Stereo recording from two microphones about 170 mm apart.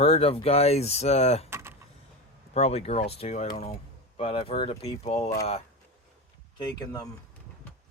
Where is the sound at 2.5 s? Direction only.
40° left (ahead or behind).